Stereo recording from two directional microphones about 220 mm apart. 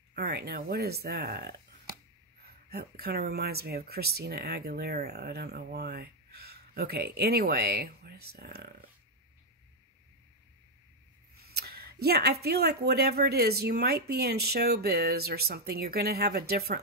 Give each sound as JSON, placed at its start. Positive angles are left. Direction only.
{"t": 0.1, "sound": "speech", "side_deg": -45}
{"t": 11.3, "sound": "speech", "side_deg": -45}